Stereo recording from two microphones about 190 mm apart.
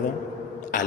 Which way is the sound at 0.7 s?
45° left (ahead or behind).